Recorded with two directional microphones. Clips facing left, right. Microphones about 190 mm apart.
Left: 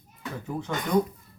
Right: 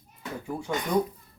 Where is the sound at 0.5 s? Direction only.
10° right (ahead or behind).